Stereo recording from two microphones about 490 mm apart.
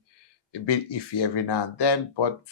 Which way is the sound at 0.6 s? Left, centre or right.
Left.